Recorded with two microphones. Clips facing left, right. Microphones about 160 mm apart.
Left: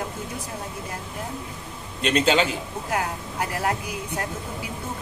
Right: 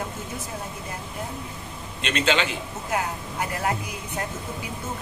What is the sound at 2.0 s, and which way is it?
Speech, 40° left (ahead or behind).